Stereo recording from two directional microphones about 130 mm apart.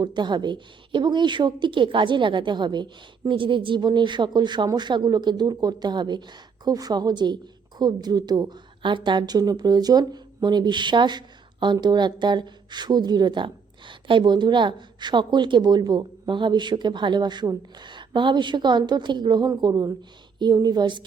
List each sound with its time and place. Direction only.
0.0 s speech: 35° right (ahead or behind)